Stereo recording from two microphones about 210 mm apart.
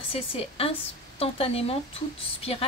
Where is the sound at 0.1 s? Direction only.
30° left (ahead or behind).